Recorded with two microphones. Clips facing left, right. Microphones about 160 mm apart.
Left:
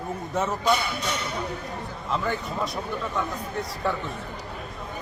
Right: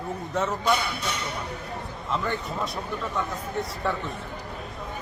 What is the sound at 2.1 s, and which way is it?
A man's voice, centre (ahead or behind).